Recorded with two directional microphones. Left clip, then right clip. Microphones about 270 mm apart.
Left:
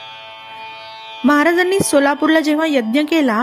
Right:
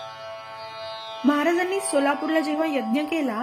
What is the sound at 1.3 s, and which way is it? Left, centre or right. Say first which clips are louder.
A woman's voice: left 9 dB; left.